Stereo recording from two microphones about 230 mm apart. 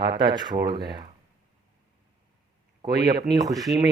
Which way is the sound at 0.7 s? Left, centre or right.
Right.